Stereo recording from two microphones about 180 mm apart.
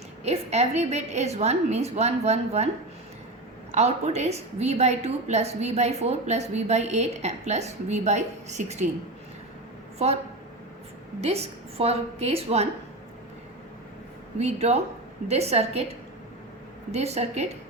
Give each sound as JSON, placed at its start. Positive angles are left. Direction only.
{"t": 0.3, "sound": "a woman's voice", "side_deg": -35}
{"t": 3.7, "sound": "a woman's voice", "side_deg": -35}
{"t": 11.2, "sound": "a woman's voice", "side_deg": -35}
{"t": 14.3, "sound": "a woman's voice", "side_deg": -35}
{"t": 16.9, "sound": "a woman's voice", "side_deg": -35}